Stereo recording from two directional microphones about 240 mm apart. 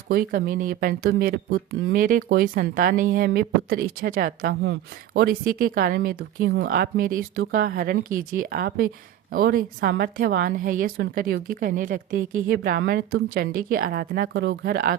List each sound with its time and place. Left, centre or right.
0.1 s speech: right